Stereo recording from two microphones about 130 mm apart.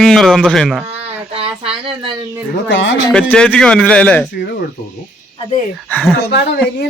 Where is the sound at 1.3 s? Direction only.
50° right (ahead or behind).